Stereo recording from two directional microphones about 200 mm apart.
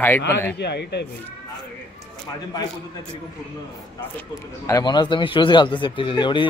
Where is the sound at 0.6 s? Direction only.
55° left (ahead or behind).